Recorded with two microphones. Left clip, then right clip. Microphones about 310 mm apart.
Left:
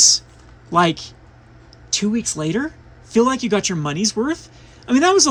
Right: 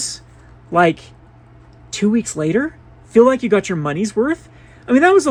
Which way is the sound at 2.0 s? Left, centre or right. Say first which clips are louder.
Right 5 dB; centre.